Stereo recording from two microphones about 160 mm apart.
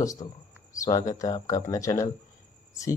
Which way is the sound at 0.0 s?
20° left (ahead or behind).